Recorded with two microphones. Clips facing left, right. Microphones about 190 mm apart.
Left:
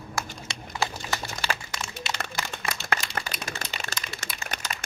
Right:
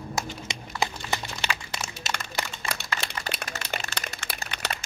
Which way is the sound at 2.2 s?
60° left (ahead or behind).